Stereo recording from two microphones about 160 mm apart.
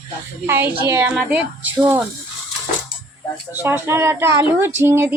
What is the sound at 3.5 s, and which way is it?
Speech, 15° right (ahead or behind).